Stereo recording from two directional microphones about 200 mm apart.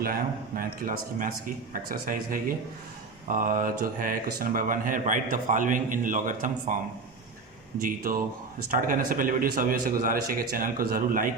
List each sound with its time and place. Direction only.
0.0 s speech: 45° right (ahead or behind)
7.8 s speech: 45° right (ahead or behind)